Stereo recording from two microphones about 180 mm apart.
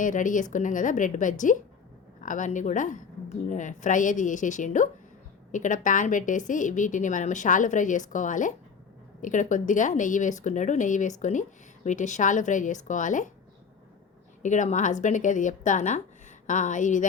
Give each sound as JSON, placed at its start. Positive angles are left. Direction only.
{"t": 0.0, "sound": "a woman's voice", "side_deg": 45}
{"t": 14.4, "sound": "a woman's voice", "side_deg": 45}